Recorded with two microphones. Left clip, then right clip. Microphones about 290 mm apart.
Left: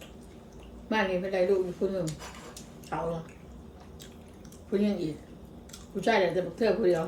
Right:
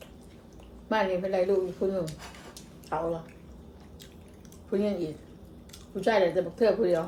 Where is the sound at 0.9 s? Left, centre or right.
Centre.